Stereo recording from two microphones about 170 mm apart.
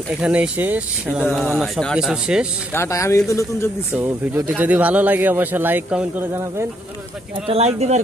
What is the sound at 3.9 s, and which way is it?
Speech, 10° right (ahead or behind).